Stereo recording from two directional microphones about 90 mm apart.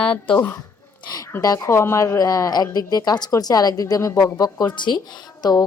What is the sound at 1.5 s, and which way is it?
Speech, 30° left (ahead or behind).